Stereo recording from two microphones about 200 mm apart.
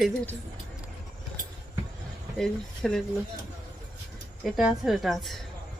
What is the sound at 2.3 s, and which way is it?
Speech, centre (ahead or behind).